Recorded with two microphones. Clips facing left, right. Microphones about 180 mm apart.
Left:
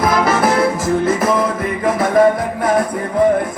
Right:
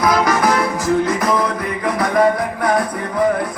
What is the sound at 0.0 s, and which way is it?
Music, 25° left (ahead or behind).